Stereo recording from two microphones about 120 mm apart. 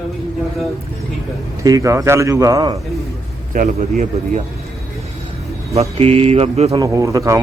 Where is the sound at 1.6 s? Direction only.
30° right (ahead or behind).